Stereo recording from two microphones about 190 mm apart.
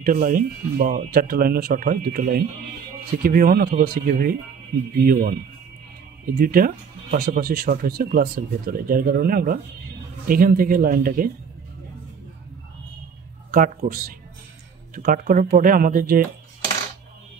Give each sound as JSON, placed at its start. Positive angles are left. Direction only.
{"t": 0.0, "sound": "speech", "side_deg": -50}
{"t": 13.5, "sound": "speech", "side_deg": -40}